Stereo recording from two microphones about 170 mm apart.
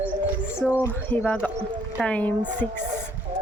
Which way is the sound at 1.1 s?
10° left (ahead or behind).